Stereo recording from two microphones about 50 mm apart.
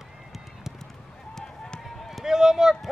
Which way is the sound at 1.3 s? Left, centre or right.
Centre.